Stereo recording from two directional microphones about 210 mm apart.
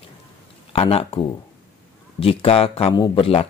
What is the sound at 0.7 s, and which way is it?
Speech, 25° left (ahead or behind).